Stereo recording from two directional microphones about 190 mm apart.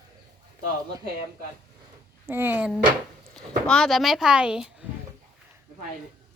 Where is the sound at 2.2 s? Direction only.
10° right (ahead or behind).